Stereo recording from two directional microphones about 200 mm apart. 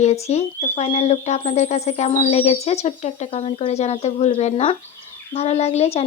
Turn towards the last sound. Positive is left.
turn(degrees=30)  # may be behind; listen again after turning